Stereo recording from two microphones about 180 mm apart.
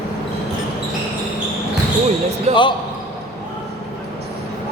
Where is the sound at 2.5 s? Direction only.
35° right (ahead or behind).